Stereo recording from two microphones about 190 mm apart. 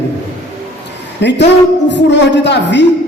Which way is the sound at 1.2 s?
65° left (ahead or behind).